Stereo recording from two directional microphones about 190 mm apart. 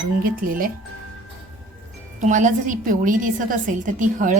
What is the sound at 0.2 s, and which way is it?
Speech, 50° right (ahead or behind).